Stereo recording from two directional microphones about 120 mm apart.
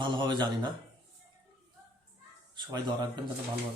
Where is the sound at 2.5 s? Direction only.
40° right (ahead or behind).